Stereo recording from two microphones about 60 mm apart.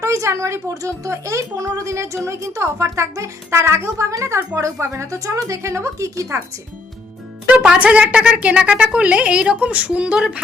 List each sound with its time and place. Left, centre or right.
0.0 s speech: right
7.4 s a woman's voice: centre